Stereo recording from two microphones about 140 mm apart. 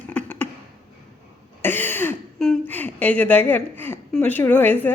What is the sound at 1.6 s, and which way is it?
Throat clearing, 15° left (ahead or behind).